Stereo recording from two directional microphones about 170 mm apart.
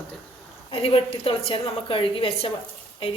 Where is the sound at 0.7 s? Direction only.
35° left (ahead or behind).